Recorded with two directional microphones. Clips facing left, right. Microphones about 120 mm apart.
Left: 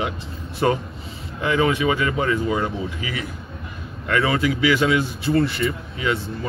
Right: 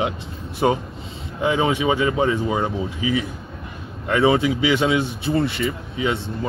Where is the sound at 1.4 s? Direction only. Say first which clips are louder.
Even; 20° right (ahead or behind).